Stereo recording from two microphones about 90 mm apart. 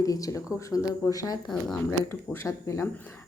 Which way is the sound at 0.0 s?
40° left (ahead or behind).